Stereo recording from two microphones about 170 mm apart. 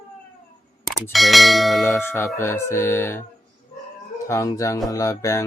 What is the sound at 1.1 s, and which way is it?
Bell, centre (ahead or behind).